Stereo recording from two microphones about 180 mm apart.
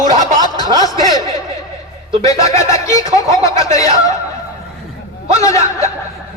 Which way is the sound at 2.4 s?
15° left (ahead or behind).